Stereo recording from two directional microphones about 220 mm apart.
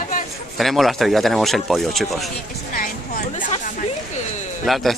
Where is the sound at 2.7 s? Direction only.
35° left (ahead or behind).